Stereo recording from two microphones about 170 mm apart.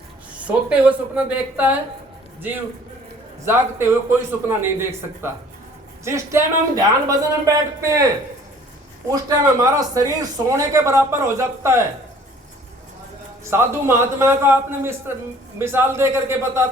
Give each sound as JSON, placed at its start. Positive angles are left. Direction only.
{"t": 0.3, "sound": "speech", "side_deg": -10}
{"t": 3.4, "sound": "speech", "side_deg": -15}
{"t": 9.4, "sound": "speech", "side_deg": -20}
{"t": 13.4, "sound": "speech", "side_deg": -15}